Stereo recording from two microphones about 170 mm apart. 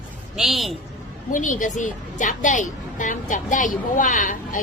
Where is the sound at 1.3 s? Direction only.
50° left (ahead or behind).